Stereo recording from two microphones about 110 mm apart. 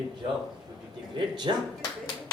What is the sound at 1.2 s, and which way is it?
Speech, 45° right (ahead or behind).